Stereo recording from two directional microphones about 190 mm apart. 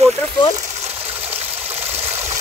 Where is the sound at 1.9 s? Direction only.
35° right (ahead or behind).